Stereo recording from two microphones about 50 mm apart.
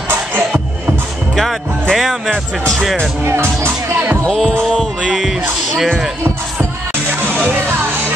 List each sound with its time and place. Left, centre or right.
0.1 s music: right
1.3 s music: centre
2.0 s speech: centre
3.3 s speech: right
4.3 s speech: centre
6.2 s music: right